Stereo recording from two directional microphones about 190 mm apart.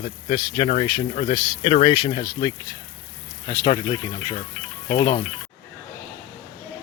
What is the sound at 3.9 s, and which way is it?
Speech, 35° left (ahead or behind).